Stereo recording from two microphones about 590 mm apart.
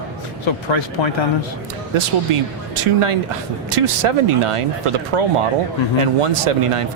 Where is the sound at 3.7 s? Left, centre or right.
Right.